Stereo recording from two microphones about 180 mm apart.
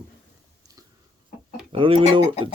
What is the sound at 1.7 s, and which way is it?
Speech, 30° right (ahead or behind).